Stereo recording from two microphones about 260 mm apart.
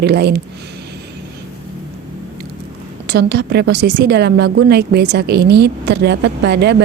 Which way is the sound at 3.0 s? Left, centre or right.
Right.